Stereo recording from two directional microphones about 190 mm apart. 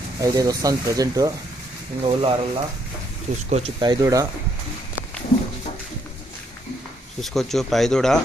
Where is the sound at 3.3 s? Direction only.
40° right (ahead or behind).